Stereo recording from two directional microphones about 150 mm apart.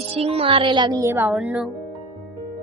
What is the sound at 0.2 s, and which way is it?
A woman's voice, 40° right (ahead or behind).